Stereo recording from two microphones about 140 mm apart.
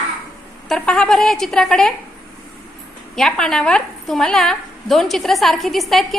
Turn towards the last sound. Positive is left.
turn(degrees=0)  # may be behind; listen again after turning